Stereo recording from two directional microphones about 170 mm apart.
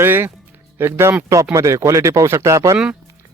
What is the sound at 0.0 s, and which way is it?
Speech, 15° right (ahead or behind).